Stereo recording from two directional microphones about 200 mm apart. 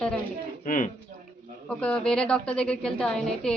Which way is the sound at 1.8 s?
5° left (ahead or behind).